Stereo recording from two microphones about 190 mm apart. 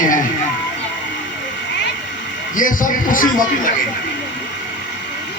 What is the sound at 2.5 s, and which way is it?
Speech, 45° left (ahead or behind).